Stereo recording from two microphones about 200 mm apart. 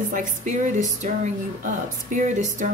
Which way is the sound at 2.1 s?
35° right (ahead or behind).